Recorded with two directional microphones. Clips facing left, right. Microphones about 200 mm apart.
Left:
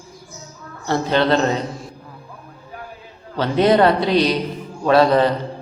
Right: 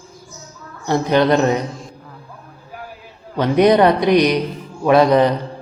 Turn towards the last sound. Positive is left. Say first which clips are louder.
# right 2 dB
turn(degrees=-15)  # may be behind; listen again after turning